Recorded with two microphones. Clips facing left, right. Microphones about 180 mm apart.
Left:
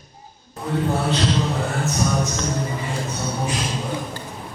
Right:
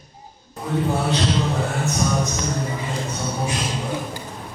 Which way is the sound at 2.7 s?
5° right (ahead or behind).